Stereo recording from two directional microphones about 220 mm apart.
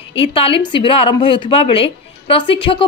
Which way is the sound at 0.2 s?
25° left (ahead or behind).